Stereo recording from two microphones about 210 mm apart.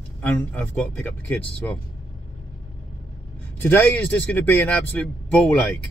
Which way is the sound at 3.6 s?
10° left (ahead or behind).